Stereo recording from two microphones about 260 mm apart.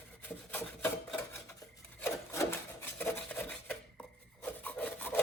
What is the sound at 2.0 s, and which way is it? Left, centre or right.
Filing, centre.